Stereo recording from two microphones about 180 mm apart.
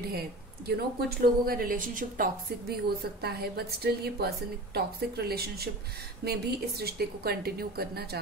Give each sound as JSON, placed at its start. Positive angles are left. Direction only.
{"t": 0.0, "sound": "speech", "side_deg": -60}